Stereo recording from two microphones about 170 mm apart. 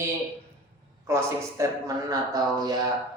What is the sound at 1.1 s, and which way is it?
A man's voice, 15° right (ahead or behind).